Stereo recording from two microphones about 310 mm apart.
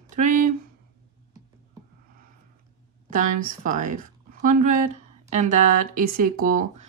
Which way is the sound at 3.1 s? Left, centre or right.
Right.